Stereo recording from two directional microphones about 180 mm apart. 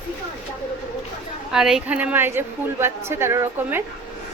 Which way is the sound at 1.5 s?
5° right (ahead or behind).